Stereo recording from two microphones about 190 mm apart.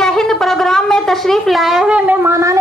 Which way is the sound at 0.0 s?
5° left (ahead or behind).